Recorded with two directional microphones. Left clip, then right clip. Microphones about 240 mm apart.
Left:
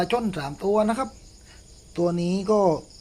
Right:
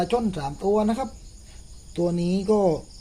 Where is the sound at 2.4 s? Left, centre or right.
Centre.